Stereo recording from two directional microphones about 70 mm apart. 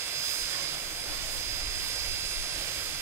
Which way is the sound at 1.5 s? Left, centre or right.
Right.